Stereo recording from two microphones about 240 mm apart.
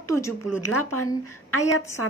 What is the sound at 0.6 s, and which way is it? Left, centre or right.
Speech, left.